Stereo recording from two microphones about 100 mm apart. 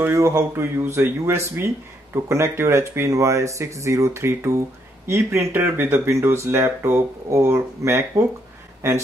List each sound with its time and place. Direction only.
0.0 s speech: 30° right (ahead or behind)